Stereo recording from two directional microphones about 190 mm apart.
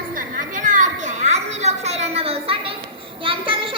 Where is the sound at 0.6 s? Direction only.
40° right (ahead or behind).